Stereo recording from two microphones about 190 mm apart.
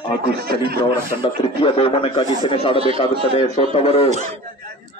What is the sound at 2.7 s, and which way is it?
Speech, 30° right (ahead or behind).